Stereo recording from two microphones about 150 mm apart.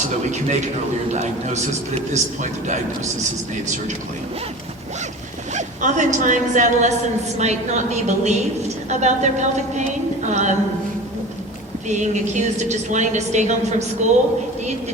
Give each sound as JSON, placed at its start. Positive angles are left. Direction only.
{"t": 0.3, "sound": "a woman's voice", "side_deg": -50}
{"t": 5.5, "sound": "a woman's voice", "side_deg": -55}
{"t": 11.9, "sound": "a woman's voice", "side_deg": -50}